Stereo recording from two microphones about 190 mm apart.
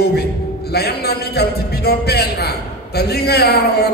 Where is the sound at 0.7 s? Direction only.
55° left (ahead or behind).